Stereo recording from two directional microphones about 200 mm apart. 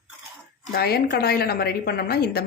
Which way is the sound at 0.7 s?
50° left (ahead or behind).